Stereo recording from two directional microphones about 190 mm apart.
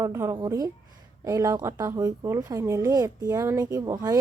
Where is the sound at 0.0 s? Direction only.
15° right (ahead or behind).